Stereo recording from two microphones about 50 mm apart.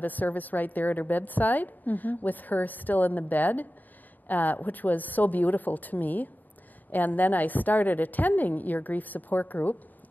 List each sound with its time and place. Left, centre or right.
0.0 s a woman's voice: left